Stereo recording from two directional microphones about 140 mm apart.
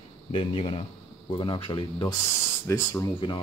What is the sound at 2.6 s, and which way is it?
Speech, 20° left (ahead or behind).